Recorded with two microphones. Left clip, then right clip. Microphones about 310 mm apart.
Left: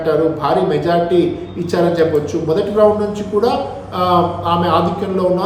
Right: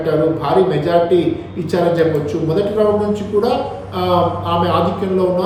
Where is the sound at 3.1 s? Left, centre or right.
Centre.